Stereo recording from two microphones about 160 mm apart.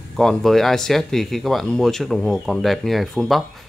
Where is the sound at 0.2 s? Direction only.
Centre (ahead or behind).